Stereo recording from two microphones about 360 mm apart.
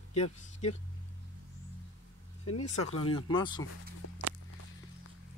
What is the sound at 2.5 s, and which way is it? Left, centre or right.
Speech, left.